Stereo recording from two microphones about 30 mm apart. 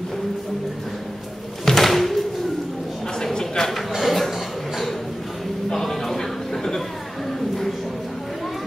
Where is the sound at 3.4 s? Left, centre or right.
Centre.